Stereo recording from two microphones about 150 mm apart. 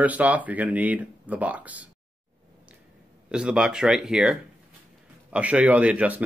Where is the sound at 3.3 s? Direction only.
5° right (ahead or behind).